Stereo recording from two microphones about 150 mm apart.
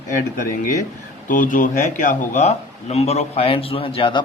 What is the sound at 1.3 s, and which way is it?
A man's voice, 60° left (ahead or behind).